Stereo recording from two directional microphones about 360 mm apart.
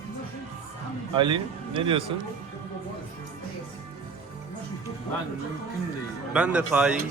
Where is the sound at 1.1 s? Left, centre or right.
Centre.